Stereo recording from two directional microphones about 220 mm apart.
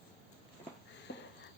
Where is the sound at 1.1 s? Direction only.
55° left (ahead or behind).